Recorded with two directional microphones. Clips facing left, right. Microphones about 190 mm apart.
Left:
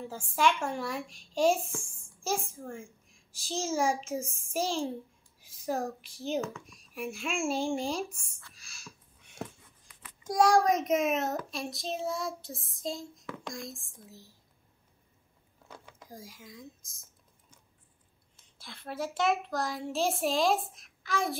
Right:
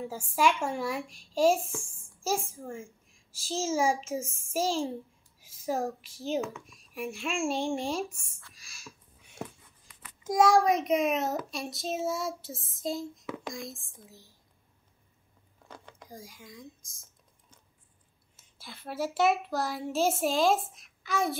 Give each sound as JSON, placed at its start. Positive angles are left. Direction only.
{"t": 0.1, "sound": "a child's voice", "side_deg": -10}
{"t": 3.4, "sound": "child singing", "side_deg": -5}
{"t": 6.1, "sound": "child singing", "side_deg": -5}
{"t": 10.3, "sound": "child singing", "side_deg": -5}
{"t": 15.7, "sound": "typing", "side_deg": 5}
{"t": 18.3, "sound": "child singing", "side_deg": -5}